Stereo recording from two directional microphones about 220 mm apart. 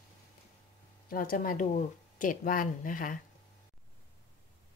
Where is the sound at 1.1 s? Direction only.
40° left (ahead or behind).